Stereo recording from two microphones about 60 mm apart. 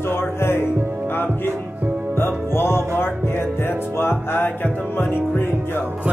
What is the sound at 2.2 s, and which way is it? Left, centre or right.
Music, left.